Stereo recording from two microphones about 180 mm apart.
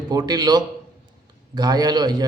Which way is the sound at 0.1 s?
20° right (ahead or behind).